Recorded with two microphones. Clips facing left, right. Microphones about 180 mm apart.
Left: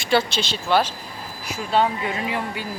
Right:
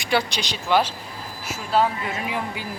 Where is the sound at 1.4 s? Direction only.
Centre (ahead or behind).